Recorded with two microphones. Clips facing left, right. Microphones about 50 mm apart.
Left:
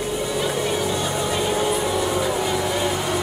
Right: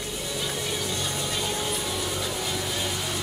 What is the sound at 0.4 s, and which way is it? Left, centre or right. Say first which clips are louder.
Vehicle: left 7 dB; left.